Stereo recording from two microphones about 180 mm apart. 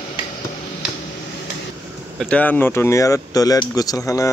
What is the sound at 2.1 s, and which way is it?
Speech, 5° left (ahead or behind).